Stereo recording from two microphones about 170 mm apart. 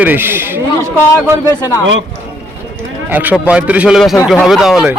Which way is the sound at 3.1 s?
10° right (ahead or behind).